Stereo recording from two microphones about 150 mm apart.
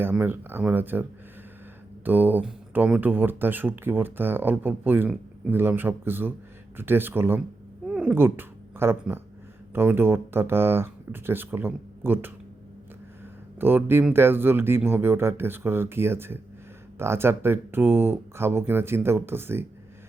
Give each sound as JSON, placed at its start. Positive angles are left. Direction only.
{"t": 0.0, "sound": "speech", "side_deg": -15}
{"t": 2.0, "sound": "speech", "side_deg": -10}
{"t": 7.9, "sound": "cat", "side_deg": -5}
{"t": 8.1, "sound": "speech", "side_deg": -15}
{"t": 13.6, "sound": "speech", "side_deg": -15}